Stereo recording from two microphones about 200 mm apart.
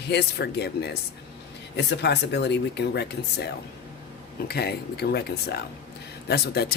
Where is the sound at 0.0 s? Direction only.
55° left (ahead or behind).